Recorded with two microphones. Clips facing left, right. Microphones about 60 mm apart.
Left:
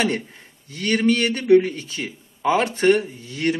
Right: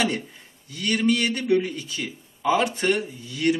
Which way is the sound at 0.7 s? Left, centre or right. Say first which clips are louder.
Left 3 dB; left.